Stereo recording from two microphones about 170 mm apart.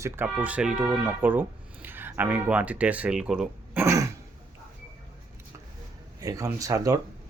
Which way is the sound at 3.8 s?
20° right (ahead or behind).